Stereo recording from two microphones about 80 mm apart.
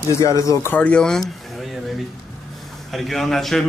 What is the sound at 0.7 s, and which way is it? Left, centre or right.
Speech, centre.